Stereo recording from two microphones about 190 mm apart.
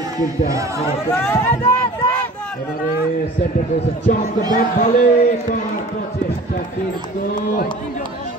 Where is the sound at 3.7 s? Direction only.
35° left (ahead or behind).